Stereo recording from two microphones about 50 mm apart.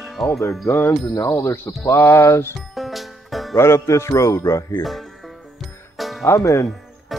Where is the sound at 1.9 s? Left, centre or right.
Left.